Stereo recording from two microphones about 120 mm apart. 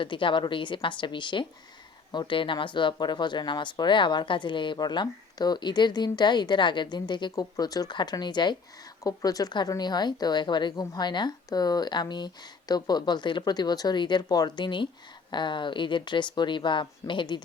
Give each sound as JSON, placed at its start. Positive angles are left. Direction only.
{"t": 0.0, "sound": "a woman's voice", "side_deg": 45}